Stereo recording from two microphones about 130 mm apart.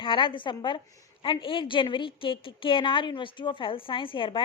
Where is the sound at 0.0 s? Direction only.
40° left (ahead or behind).